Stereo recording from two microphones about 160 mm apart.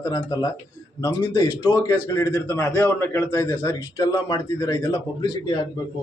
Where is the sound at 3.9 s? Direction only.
30° left (ahead or behind).